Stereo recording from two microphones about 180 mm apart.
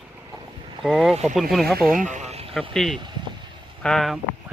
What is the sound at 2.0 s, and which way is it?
Insect, 40° right (ahead or behind).